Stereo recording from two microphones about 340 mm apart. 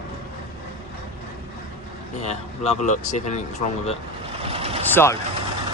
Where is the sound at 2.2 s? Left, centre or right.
Centre.